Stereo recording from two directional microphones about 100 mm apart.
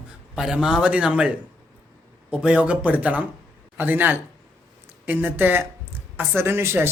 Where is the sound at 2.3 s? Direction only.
10° right (ahead or behind).